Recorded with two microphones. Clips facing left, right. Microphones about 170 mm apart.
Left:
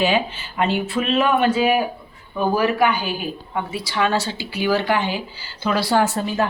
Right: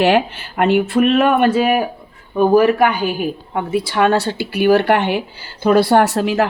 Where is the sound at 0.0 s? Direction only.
70° right (ahead or behind).